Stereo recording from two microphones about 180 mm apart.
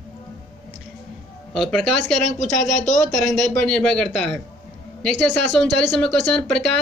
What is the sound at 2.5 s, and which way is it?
Speech, 45° left (ahead or behind).